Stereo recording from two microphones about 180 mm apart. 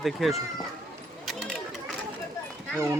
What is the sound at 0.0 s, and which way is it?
Speech, centre (ahead or behind).